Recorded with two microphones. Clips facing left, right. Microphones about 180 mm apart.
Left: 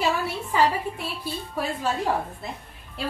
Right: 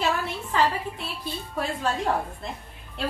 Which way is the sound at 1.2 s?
5° left (ahead or behind).